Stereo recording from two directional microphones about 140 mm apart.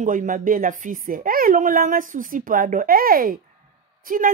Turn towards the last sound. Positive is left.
turn(degrees=-85)